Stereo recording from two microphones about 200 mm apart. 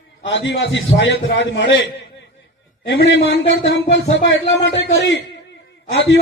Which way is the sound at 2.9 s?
60° left (ahead or behind).